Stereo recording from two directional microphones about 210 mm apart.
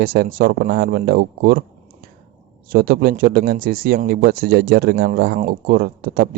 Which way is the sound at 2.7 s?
45° right (ahead or behind).